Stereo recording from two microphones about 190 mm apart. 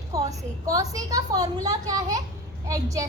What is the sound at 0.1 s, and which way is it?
A woman's voice, 20° right (ahead or behind).